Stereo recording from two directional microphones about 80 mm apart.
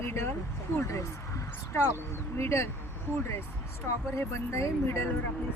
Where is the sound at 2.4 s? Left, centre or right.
Left.